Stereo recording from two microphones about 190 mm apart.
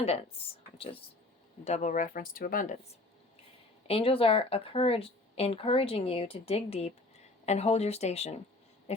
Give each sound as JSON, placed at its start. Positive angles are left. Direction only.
{"t": 0.0, "sound": "speech", "side_deg": 35}
{"t": 3.8, "sound": "speech", "side_deg": 30}